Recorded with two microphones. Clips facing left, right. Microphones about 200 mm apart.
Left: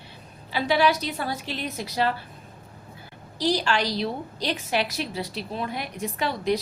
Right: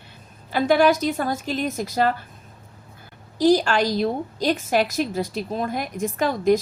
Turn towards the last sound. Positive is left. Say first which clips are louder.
# right 6 dB
turn(degrees=-45)  # may be behind; listen again after turning